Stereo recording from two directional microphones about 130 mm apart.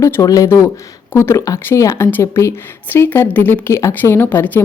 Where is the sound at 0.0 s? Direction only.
25° left (ahead or behind).